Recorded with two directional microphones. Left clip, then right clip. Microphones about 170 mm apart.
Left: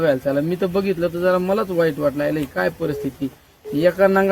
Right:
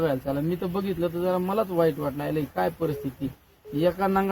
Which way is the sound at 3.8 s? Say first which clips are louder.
Left 8 dB; 25° right (ahead or behind).